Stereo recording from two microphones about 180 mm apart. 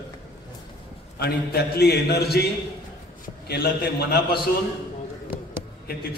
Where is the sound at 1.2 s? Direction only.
65° left (ahead or behind).